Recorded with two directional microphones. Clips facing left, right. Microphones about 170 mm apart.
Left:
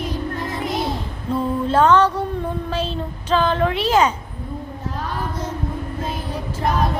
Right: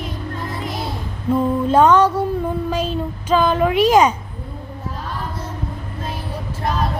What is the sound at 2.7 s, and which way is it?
A woman's voice, 10° right (ahead or behind).